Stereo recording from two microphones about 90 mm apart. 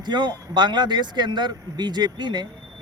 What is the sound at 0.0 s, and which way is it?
Speech, 55° right (ahead or behind).